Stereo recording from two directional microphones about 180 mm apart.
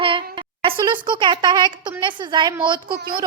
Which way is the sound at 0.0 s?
30° right (ahead or behind).